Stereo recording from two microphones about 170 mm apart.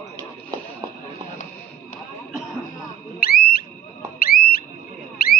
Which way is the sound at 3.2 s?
65° left (ahead or behind).